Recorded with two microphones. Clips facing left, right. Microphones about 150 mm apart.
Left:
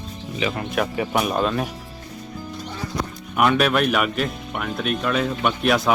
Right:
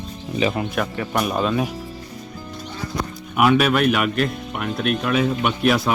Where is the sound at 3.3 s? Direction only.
5° right (ahead or behind).